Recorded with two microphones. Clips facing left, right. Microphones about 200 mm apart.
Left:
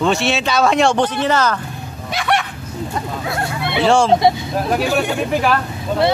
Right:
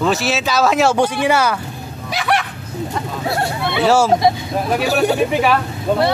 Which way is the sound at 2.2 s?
Centre (ahead or behind).